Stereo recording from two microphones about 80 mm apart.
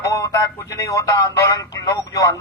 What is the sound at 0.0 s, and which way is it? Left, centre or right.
Speech, left.